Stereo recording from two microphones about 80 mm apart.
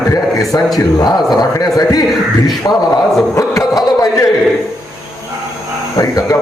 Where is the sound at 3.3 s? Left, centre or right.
Left.